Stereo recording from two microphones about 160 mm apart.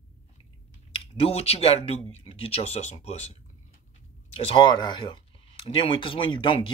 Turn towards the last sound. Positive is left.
turn(degrees=30)  # may be behind; listen again after turning